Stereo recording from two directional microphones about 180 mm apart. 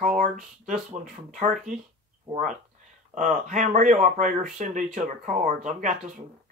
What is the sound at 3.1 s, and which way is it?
Speech, 45° right (ahead or behind).